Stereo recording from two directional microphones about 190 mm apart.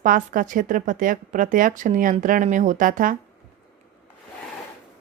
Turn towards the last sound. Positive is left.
turn(degrees=-45)  # may be behind; listen again after turning